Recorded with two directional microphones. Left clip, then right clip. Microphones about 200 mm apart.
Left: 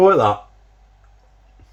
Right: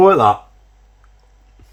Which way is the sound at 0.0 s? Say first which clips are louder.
Right 2 dB; 25° right (ahead or behind).